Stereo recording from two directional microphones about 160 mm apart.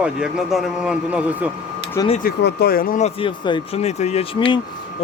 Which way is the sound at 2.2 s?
85° left.